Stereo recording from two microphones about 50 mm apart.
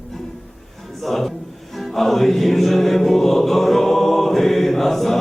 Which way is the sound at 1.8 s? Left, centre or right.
Centre.